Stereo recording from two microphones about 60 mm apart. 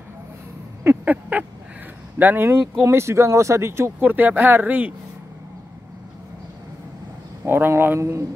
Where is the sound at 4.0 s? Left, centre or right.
Right.